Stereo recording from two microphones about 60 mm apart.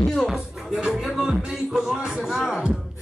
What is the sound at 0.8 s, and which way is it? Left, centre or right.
Speech, centre.